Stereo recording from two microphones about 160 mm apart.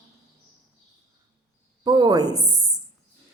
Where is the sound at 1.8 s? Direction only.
25° right (ahead or behind).